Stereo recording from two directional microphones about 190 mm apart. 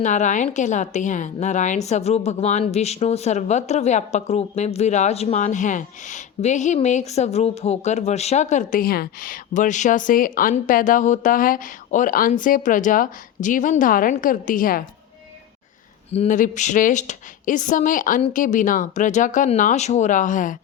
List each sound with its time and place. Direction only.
0.0 s a woman's voice: 40° left (ahead or behind)
16.1 s speech: 40° left (ahead or behind)